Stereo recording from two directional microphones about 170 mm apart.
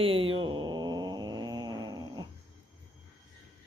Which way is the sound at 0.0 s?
35° right (ahead or behind).